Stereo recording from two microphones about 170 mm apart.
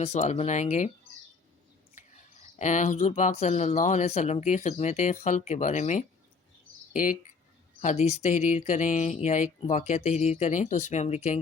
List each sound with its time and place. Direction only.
0.0 s speech: 40° left (ahead or behind)
2.0 s speech: 45° left (ahead or behind)
7.8 s speech: 40° left (ahead or behind)